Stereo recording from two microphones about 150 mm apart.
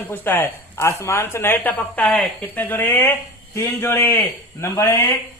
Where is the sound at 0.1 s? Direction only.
15° left (ahead or behind).